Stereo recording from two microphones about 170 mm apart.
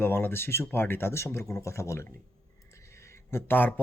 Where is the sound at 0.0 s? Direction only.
15° left (ahead or behind).